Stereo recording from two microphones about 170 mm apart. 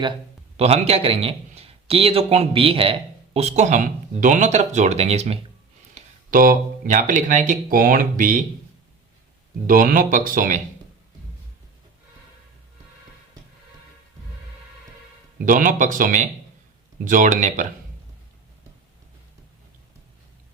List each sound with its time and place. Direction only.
0.5 s a man's voice: 35° right (ahead or behind)
5.9 s speech: 55° right (ahead or behind)
9.6 s speech: 55° right (ahead or behind)
15.4 s speech: 50° right (ahead or behind)